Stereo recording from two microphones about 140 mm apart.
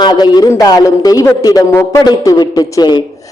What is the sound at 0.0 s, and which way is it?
A man's voice, 30° left (ahead or behind).